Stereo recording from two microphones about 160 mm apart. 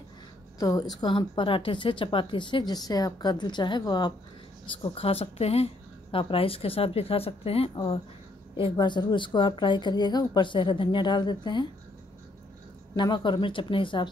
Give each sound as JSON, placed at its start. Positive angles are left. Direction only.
{"t": 0.6, "sound": "a woman's voice", "side_deg": 20}
{"t": 12.9, "sound": "speech", "side_deg": 30}